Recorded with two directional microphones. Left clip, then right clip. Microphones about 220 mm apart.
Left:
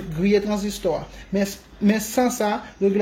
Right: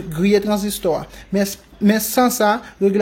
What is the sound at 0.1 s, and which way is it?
A woman's voice, 25° right (ahead or behind).